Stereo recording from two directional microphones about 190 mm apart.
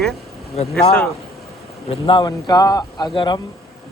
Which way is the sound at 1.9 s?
25° left (ahead or behind).